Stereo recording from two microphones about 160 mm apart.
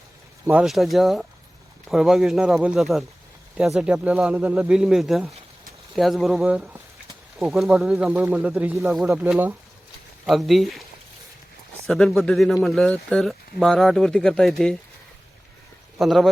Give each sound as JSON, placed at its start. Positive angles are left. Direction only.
{"t": 0.4, "sound": "speech", "side_deg": -5}
{"t": 10.2, "sound": "speech", "side_deg": 0}
{"t": 11.9, "sound": "speech", "side_deg": 0}
{"t": 16.0, "sound": "speech", "side_deg": 0}